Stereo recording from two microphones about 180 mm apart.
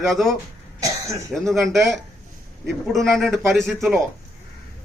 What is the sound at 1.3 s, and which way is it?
Speech, centre (ahead or behind).